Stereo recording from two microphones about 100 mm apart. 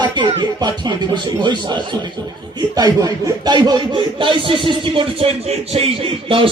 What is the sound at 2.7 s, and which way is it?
Speech, 40° right (ahead or behind).